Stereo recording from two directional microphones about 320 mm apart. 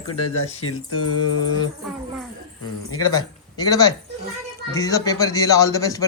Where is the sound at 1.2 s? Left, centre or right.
Centre.